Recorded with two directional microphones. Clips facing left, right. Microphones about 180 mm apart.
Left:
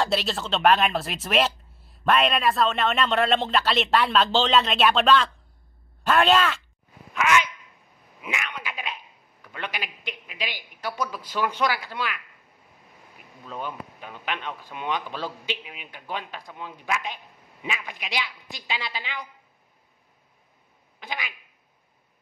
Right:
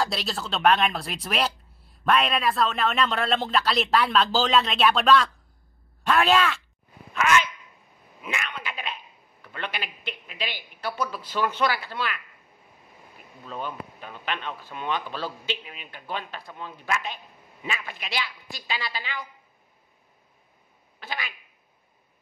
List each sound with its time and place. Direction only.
0.0 s speech: centre (ahead or behind)
13.5 s speech: 10° left (ahead or behind)
21.0 s speech: 15° left (ahead or behind)